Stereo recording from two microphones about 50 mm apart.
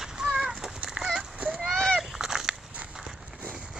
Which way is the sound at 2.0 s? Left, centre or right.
Centre.